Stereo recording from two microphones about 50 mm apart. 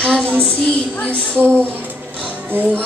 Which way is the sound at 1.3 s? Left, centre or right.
Right.